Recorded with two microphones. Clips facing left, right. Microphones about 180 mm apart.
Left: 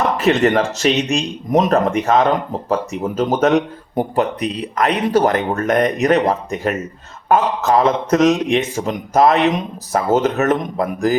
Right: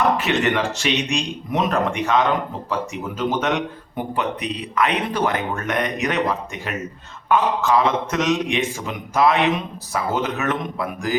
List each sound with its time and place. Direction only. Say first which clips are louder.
0.2 s speech: left 6 dB; 40° left (ahead or behind)